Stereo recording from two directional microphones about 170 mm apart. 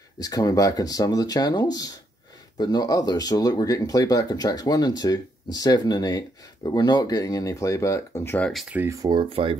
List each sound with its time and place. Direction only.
0.2 s speech: 20° left (ahead or behind); by 8.6 s 5° left (ahead or behind)
8.6 s speech: 10° right (ahead or behind)
8.9 s speech: 20° right (ahead or behind)
9.3 s speech: 30° right (ahead or behind)